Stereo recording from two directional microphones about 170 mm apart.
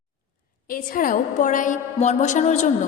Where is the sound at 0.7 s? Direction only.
55° left (ahead or behind).